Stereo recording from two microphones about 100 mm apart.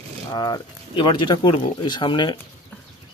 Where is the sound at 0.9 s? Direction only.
55° left (ahead or behind).